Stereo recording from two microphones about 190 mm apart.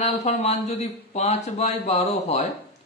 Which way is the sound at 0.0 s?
35° left (ahead or behind).